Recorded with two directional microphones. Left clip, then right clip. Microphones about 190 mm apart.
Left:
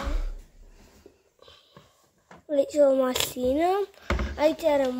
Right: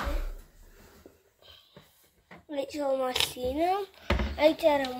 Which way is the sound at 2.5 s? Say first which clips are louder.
Left 9 dB; 45° left (ahead or behind).